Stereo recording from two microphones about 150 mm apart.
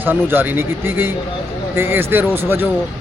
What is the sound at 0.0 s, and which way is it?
A man's voice, 15° right (ahead or behind).